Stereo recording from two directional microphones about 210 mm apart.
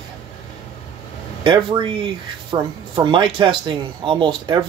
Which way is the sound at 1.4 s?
25° right (ahead or behind).